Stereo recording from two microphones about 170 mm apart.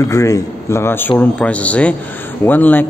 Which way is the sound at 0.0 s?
20° left (ahead or behind).